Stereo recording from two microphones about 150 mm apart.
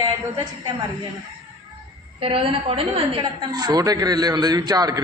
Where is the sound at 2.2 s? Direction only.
40° right (ahead or behind).